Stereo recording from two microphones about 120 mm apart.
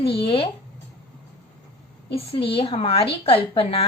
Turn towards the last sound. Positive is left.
turn(degrees=50)  # may be behind; listen again after turning